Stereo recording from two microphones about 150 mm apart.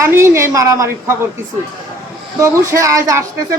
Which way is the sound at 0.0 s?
20° right (ahead or behind).